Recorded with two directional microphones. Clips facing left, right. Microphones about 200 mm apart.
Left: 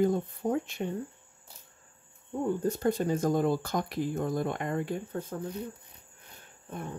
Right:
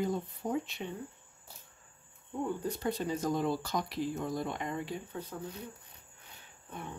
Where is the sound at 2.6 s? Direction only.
45° left (ahead or behind).